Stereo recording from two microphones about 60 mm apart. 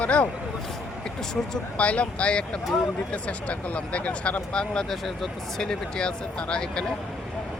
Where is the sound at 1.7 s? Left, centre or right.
Left.